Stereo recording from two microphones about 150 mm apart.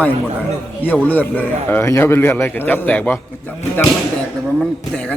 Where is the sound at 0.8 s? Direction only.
10° left (ahead or behind).